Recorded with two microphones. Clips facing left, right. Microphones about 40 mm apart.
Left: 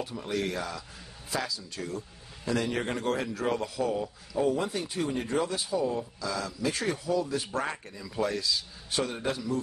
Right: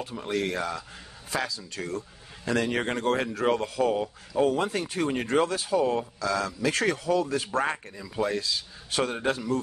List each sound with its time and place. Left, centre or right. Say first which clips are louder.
0.3 s speech: right 4 dB; right
4.5 s speech: right 2 dB; right
8.0 s speech: right 1 dB; right
8.4 s speech: right 1 dB; right